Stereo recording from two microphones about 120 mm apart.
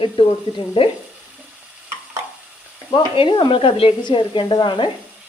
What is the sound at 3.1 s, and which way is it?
Speech, 45° left (ahead or behind).